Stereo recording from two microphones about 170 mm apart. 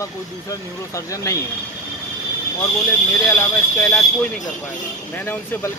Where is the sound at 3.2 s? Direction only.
15° left (ahead or behind).